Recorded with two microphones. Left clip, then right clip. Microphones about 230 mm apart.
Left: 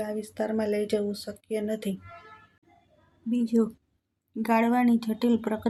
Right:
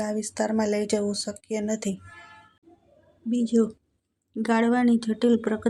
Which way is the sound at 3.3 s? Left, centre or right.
Centre.